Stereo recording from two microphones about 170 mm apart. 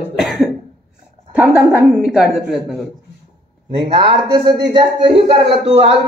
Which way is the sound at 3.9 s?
25° right (ahead or behind).